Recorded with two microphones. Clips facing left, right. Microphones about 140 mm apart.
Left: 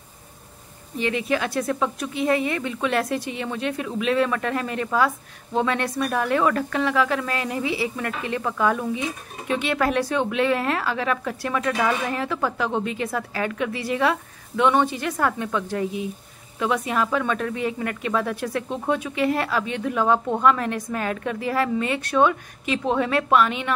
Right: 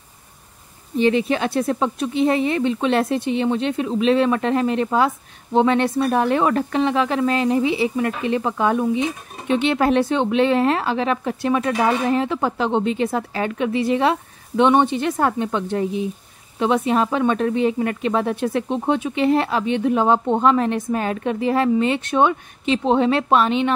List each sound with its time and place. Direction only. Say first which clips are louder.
0.9 s speech: right 6 dB; 30° right (ahead or behind)